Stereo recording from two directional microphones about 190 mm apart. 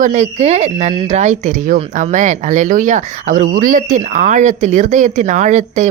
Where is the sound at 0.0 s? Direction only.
40° right (ahead or behind).